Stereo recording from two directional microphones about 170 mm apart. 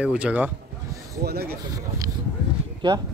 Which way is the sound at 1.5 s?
20° right (ahead or behind).